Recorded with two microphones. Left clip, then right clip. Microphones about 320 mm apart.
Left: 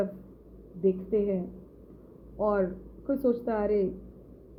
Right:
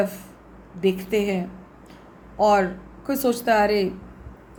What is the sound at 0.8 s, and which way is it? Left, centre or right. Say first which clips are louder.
Speech: right 4 dB; centre.